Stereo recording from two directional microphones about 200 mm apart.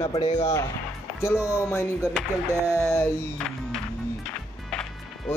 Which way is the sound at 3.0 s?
5° left (ahead or behind).